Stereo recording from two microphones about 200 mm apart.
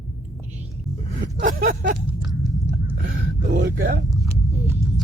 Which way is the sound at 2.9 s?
50° right (ahead or behind).